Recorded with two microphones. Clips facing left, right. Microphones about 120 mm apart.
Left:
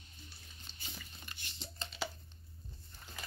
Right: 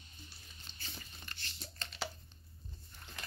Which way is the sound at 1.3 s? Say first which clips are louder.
Right 1 dB; 15° left (ahead or behind).